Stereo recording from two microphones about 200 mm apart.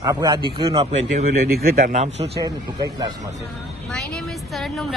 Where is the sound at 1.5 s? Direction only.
50° right (ahead or behind).